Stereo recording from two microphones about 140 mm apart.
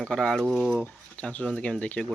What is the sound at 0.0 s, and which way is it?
Speech, 5° left (ahead or behind).